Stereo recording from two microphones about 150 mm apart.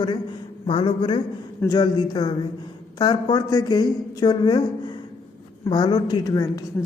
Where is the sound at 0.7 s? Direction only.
35° left (ahead or behind).